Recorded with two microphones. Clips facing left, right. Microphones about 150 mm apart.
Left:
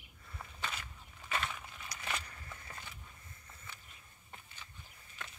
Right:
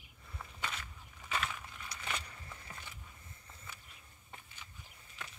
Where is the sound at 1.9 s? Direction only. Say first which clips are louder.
Even; 25° right (ahead or behind).